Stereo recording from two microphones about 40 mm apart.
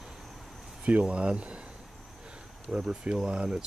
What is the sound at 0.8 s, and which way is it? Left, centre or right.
Speech, right.